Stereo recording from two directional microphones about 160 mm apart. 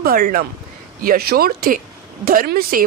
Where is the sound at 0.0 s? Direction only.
65° right (ahead or behind).